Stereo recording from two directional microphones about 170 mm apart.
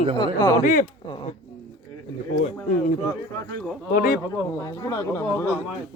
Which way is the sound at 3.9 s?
55° left (ahead or behind).